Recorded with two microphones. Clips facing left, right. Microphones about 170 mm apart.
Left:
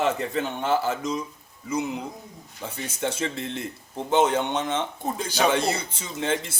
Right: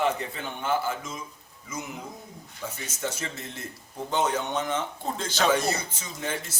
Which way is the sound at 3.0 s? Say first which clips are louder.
Left 6 dB; 25° left (ahead or behind).